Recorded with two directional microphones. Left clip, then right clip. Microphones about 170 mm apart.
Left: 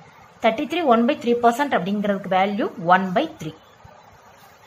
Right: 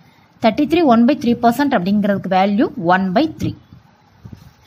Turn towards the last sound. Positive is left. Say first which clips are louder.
# right 5 dB
turn(degrees=-45)  # may be behind; listen again after turning